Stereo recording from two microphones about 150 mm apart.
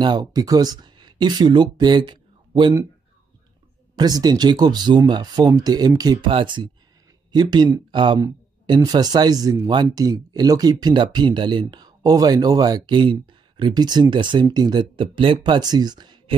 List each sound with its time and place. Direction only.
0.0 s speech: 30° right (ahead or behind)
3.9 s speech: 25° right (ahead or behind)